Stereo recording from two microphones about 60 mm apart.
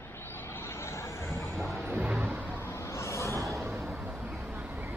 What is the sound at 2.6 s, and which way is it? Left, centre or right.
Vehicle, left.